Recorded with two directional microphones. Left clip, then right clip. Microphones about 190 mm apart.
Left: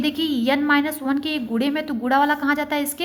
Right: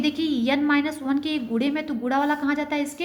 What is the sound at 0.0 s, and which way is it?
A woman's voice, 25° left (ahead or behind).